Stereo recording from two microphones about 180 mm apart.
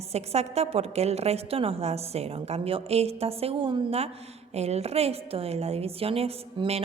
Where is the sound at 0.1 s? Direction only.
35° right (ahead or behind).